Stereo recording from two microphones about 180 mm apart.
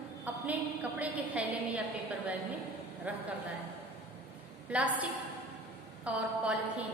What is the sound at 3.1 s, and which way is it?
Speech, 10° right (ahead or behind).